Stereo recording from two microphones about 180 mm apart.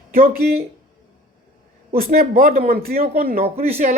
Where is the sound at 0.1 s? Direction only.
55° right (ahead or behind).